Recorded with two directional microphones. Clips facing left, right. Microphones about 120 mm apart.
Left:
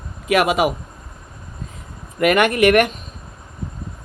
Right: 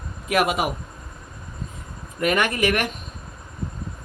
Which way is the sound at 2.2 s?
70° left (ahead or behind).